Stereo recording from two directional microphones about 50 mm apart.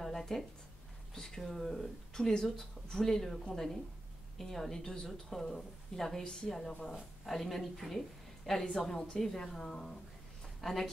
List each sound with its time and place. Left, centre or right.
0.0 s a sound: centre
1.1 s speech: centre
6.2 s speech: centre
7.2 s a woman's voice: centre
10.6 s speech: centre